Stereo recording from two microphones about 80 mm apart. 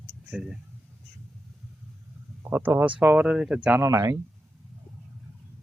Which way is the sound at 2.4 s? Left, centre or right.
Right.